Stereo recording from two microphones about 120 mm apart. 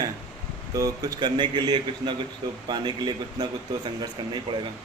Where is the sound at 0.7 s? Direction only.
30° right (ahead or behind).